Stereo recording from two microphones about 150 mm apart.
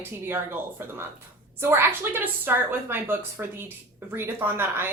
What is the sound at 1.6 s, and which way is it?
A woman's voice, 15° right (ahead or behind).